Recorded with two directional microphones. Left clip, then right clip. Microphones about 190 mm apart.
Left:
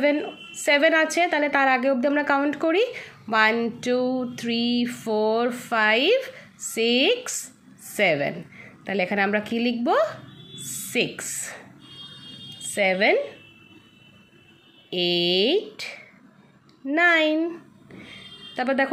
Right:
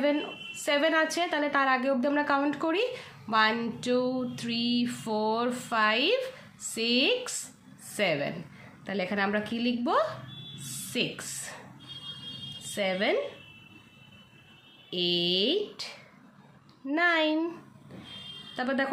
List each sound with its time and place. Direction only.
0.0 s a woman's voice: 20° left (ahead or behind)
10.6 s a sound: 20° left (ahead or behind)
12.6 s a woman's voice: 25° left (ahead or behind)
14.9 s a woman's voice: 25° left (ahead or behind)
18.5 s speech: 25° left (ahead or behind)